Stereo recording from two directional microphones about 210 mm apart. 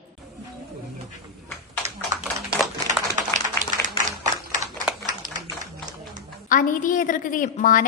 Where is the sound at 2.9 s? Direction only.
35° right (ahead or behind).